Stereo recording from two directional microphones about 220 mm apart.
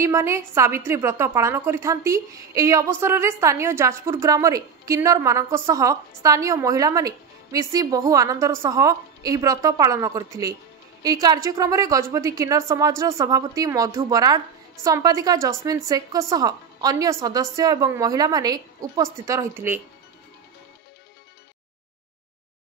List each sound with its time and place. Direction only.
0.0 s a woman's voice: 15° right (ahead or behind)